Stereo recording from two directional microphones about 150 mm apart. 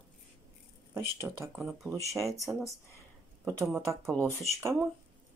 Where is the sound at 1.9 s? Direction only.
20° right (ahead or behind).